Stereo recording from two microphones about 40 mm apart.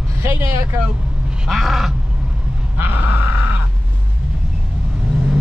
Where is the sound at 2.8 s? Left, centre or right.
Right.